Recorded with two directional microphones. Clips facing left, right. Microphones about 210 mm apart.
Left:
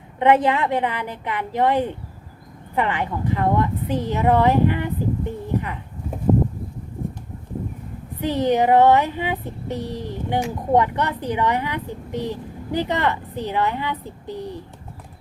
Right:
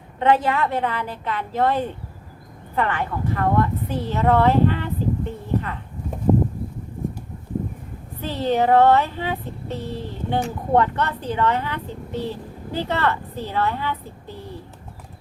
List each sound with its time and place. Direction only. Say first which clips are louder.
0.2 s child singing: left 2 dB; 20° left (ahead or behind)
8.2 s child singing: left 2 dB; 15° left (ahead or behind)